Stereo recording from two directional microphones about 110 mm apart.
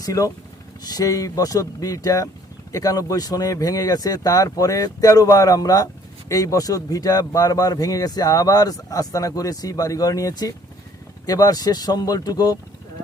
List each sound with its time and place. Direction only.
0.0 s speech: 30° left (ahead or behind)